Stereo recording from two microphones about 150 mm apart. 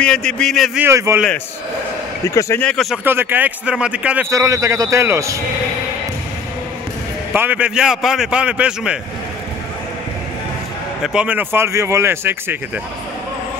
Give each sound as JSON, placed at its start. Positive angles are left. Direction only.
{"t": 0.0, "sound": "a man's voice", "side_deg": 5}
{"t": 0.7, "sound": "speech", "side_deg": -20}
{"t": 2.2, "sound": "a man's voice", "side_deg": 20}
{"t": 2.6, "sound": "a man's voice", "side_deg": 5}
{"t": 3.0, "sound": "speech", "side_deg": -15}
{"t": 4.3, "sound": "a man's voice", "side_deg": -20}
{"t": 7.3, "sound": "speech", "side_deg": -10}
{"t": 11.0, "sound": "speech", "side_deg": -10}